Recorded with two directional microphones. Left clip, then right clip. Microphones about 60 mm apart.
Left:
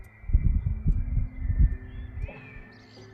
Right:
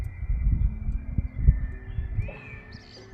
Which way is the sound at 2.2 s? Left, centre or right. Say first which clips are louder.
Right 2 dB; centre.